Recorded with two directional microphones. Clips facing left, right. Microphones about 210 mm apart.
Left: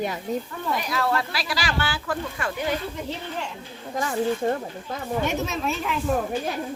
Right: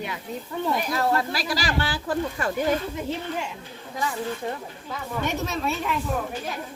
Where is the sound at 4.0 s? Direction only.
50° left (ahead or behind).